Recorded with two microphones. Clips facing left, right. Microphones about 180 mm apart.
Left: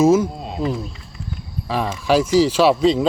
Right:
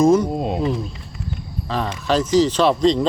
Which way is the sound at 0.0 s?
5° left (ahead or behind).